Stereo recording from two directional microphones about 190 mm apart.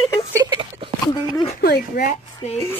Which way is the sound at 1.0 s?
20° left (ahead or behind).